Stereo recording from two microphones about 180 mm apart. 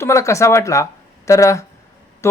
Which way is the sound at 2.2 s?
15° left (ahead or behind).